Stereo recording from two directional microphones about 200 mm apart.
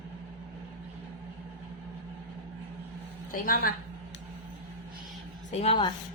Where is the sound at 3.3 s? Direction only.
45° left (ahead or behind).